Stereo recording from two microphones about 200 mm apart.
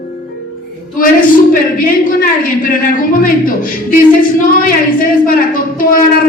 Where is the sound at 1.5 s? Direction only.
45° left (ahead or behind).